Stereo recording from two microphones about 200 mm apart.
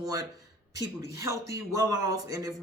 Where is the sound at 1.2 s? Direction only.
15° right (ahead or behind).